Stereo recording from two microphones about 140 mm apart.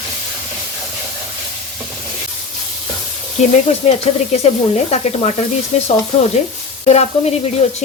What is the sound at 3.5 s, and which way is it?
Sizzle, 55° left (ahead or behind).